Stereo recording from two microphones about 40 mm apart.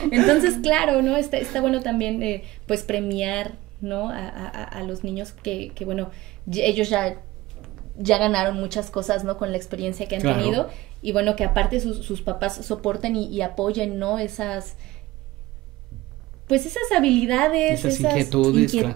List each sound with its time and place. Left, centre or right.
0.0 s a woman's voice: centre
16.4 s a woman's voice: centre